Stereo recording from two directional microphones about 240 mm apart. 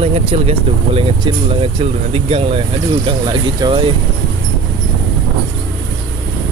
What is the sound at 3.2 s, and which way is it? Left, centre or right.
Speech, centre.